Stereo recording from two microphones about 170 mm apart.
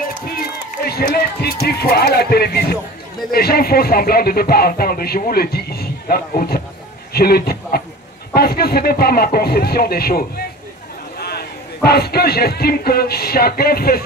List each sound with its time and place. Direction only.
0.8 s speech: 65° left (ahead or behind)
7.1 s a sound: 65° left (ahead or behind)
8.3 s a man's voice: 65° left (ahead or behind)